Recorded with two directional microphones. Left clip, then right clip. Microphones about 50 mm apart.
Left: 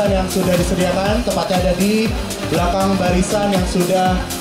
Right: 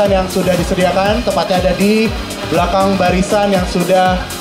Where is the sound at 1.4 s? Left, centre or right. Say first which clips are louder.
Right 4 dB; right.